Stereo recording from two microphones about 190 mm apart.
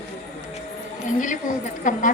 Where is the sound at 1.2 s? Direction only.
40° left (ahead or behind).